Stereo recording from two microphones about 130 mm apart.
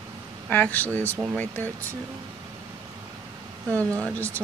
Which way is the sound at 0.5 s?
15° left (ahead or behind).